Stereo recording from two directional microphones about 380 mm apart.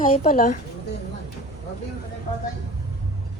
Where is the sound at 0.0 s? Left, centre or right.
Left.